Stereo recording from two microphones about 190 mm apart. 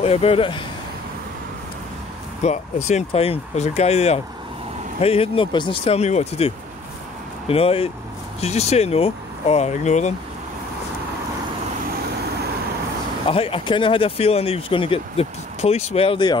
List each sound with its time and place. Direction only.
0.0 s speech: 30° left (ahead or behind)
2.4 s speech: 35° left (ahead or behind)
13.3 s speech: 30° left (ahead or behind)